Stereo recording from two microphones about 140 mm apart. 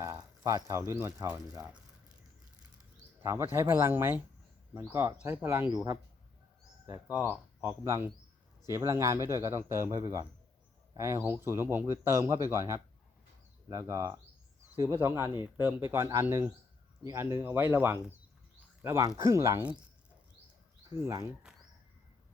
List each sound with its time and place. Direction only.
0.0 s speech: 20° right (ahead or behind)
3.2 s speech: 20° right (ahead or behind)
6.8 s speech: 15° right (ahead or behind)
15.0 s speech: 20° right (ahead or behind)
20.9 s speech: 25° right (ahead or behind)